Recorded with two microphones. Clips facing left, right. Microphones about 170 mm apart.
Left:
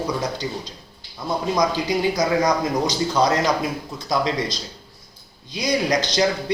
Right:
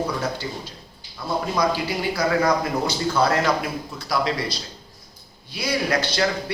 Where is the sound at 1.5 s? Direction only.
20° left (ahead or behind).